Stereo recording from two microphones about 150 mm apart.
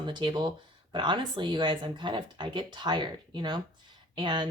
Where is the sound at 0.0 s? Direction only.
30° right (ahead or behind).